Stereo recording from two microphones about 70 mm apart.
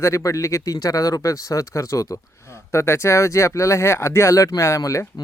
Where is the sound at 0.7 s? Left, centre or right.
Left.